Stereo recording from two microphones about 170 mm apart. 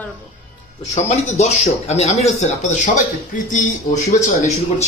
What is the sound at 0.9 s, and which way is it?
Speech, 40° left (ahead or behind).